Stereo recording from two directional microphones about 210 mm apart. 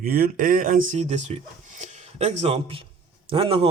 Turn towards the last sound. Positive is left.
turn(degrees=-25)  # may be behind; listen again after turning